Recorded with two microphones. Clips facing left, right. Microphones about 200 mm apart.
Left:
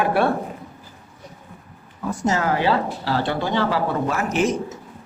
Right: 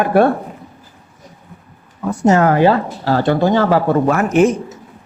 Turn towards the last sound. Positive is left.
turn(degrees=-55)  # may be behind; listen again after turning